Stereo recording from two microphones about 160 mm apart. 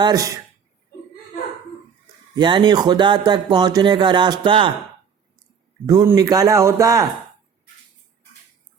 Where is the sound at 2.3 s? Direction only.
30° right (ahead or behind).